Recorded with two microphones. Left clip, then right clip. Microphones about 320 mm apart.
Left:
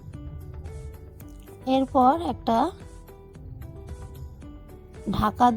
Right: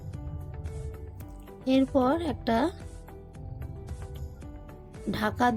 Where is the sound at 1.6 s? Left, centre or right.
Centre.